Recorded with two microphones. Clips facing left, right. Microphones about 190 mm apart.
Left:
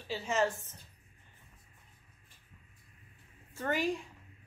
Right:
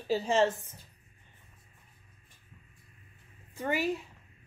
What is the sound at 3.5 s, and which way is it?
Speech, 10° right (ahead or behind).